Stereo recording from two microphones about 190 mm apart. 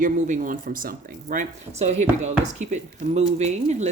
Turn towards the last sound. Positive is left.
turn(degrees=-35)  # may be behind; listen again after turning